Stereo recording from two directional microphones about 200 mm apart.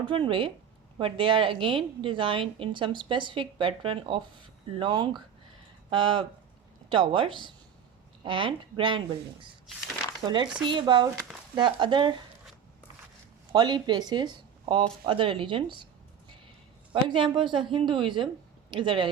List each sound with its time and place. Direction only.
0.1 s a woman's voice: 25° right (ahead or behind)
10.2 s a woman's voice: 20° right (ahead or behind)
13.5 s a woman's voice: 20° right (ahead or behind)
16.9 s a woman's voice: 25° right (ahead or behind)